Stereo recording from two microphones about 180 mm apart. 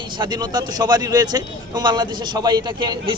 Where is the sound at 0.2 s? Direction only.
25° right (ahead or behind).